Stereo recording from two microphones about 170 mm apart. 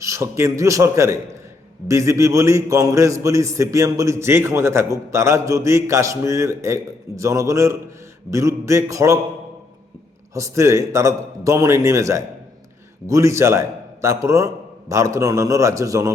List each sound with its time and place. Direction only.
0.0 s a man's voice: 15° right (ahead or behind)
8.3 s a sound: 20° right (ahead or behind)
10.3 s a man's voice: 15° right (ahead or behind)